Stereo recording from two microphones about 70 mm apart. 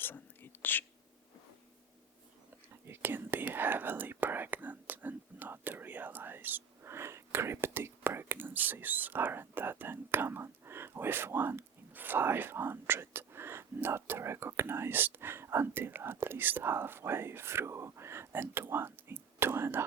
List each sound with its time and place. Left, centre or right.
0.0 s whispering: left
2.8 s speech: right